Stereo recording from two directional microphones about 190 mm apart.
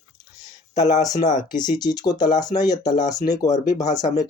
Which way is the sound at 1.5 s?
20° left (ahead or behind).